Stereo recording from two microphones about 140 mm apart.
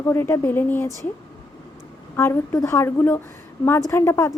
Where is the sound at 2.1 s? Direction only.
15° left (ahead or behind).